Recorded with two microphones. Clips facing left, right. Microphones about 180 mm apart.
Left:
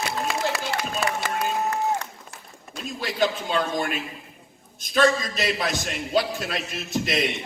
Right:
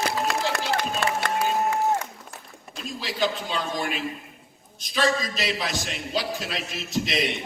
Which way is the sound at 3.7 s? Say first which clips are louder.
Left 2 dB; centre (ahead or behind).